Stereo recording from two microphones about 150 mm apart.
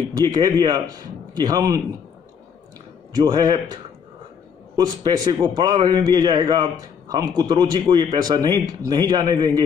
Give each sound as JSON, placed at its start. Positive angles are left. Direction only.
{"t": 0.1, "sound": "a man's voice", "side_deg": -25}
{"t": 3.2, "sound": "a man's voice", "side_deg": -30}
{"t": 4.7, "sound": "a man's voice", "side_deg": -30}